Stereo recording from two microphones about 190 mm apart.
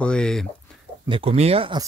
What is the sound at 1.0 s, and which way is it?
Speech, 30° right (ahead or behind).